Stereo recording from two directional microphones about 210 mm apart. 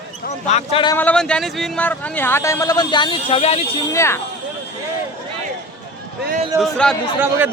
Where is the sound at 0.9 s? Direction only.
5° left (ahead or behind); by 3.7 s 30° left (ahead or behind).